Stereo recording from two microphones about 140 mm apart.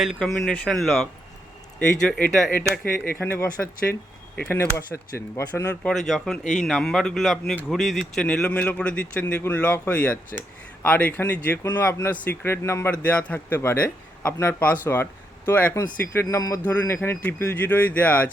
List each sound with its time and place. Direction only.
0.0 s speech: centre (ahead or behind)
4.4 s speech: 15° left (ahead or behind)
5.9 s speech: centre (ahead or behind)